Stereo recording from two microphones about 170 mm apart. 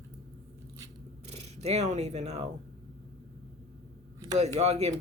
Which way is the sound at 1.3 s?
40° right (ahead or behind).